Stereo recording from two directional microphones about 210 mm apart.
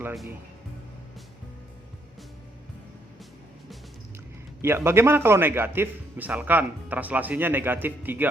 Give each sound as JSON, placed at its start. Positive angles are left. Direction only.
{"t": 4.6, "sound": "a man's voice", "side_deg": -10}